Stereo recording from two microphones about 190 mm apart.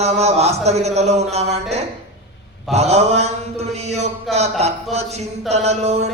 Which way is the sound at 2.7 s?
35° right (ahead or behind).